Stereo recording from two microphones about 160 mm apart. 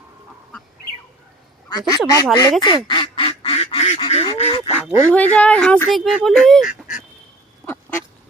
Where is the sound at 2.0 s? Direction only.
25° left (ahead or behind).